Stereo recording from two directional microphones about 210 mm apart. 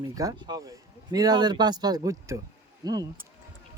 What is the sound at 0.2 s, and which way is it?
Speech, 20° right (ahead or behind).